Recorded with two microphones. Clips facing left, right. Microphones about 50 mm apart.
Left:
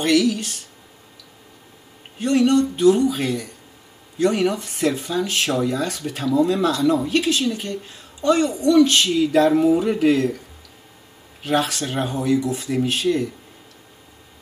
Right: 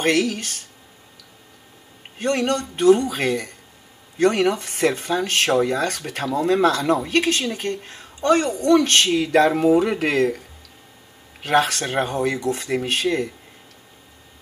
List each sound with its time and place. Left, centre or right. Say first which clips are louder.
0.0 s speech: left 2 dB; right
2.1 s speech: left 4 dB; right
11.4 s speech: right 2 dB; right